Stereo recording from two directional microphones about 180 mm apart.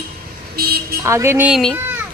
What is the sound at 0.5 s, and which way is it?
Vehicle, 60° right (ahead or behind).